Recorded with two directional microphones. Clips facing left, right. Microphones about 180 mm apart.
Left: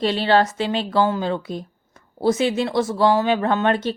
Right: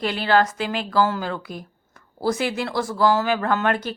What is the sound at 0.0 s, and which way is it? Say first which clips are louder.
Speech: left 2 dB; 25° left (ahead or behind).